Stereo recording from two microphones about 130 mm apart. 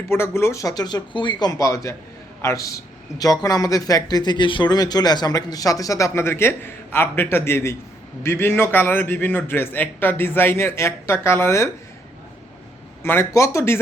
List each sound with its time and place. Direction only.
0.1 s a man's voice: 20° left (ahead or behind)
13.0 s speech: 20° left (ahead or behind)